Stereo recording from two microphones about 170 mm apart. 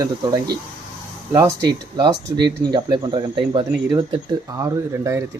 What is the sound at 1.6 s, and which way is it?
Speech, 25° right (ahead or behind).